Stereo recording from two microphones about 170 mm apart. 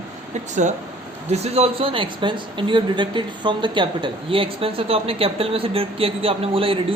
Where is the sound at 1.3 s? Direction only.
40° right (ahead or behind).